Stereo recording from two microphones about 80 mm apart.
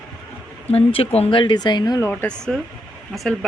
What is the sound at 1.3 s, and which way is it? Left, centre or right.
Speech, left.